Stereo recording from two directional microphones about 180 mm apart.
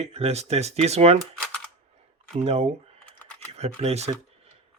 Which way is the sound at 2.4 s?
35° right (ahead or behind).